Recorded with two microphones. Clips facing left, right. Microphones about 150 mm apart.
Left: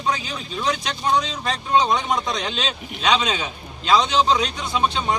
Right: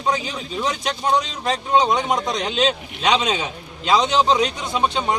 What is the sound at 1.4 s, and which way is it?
A man's voice, 15° right (ahead or behind).